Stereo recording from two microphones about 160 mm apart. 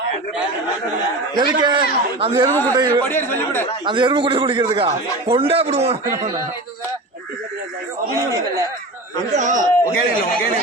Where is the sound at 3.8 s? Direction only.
30° right (ahead or behind).